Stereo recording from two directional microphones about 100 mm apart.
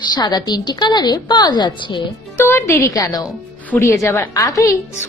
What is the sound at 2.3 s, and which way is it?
A woman's voice, 25° left (ahead or behind).